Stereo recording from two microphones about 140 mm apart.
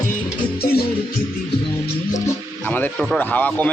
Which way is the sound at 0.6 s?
90° left.